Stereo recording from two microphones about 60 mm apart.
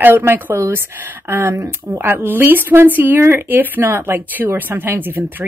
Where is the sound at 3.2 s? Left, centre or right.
Right.